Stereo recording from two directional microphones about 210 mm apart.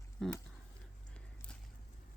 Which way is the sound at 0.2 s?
Centre (ahead or behind).